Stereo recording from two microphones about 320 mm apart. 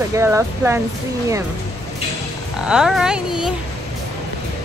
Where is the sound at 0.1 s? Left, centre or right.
Centre.